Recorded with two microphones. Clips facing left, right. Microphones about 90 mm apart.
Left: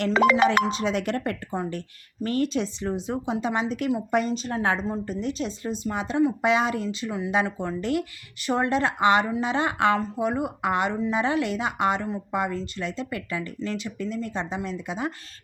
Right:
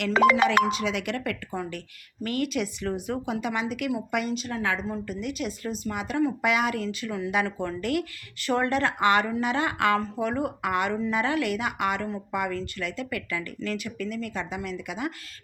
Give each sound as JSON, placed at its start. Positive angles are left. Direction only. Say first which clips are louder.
{"t": 0.0, "sound": "speech", "louder": "left 1 dB", "side_deg": 35}